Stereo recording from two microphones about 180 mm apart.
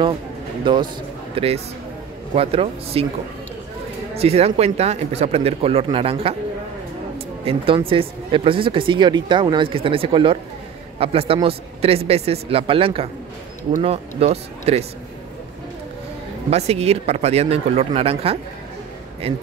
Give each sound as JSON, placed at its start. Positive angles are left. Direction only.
{"t": 0.7, "sound": "a man's voice", "side_deg": -25}
{"t": 4.1, "sound": "speech", "side_deg": -35}
{"t": 7.4, "sound": "speech", "side_deg": -30}
{"t": 16.4, "sound": "speech", "side_deg": -35}